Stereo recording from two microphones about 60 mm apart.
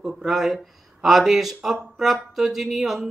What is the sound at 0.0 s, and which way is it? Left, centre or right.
Speech, centre.